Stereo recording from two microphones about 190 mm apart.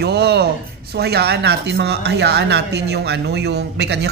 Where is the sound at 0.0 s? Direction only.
60° right (ahead or behind).